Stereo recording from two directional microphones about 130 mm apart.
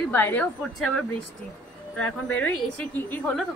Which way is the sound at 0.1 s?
15° left (ahead or behind).